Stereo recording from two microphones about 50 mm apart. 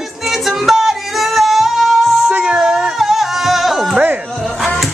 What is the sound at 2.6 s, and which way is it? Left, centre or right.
Music, centre.